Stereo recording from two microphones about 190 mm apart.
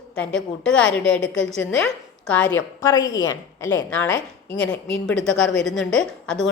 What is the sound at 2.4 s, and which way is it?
Speech, 75° left (ahead or behind).